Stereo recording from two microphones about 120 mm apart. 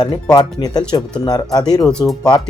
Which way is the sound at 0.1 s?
35° left (ahead or behind).